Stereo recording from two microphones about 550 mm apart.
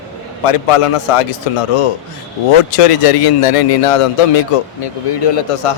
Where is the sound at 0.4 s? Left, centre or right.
Left.